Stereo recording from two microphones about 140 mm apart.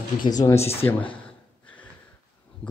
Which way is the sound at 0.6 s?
45° left (ahead or behind).